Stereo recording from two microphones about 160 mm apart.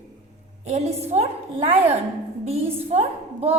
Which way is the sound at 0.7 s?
40° right (ahead or behind).